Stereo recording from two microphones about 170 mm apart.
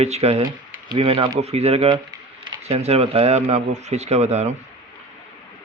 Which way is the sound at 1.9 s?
25° right (ahead or behind).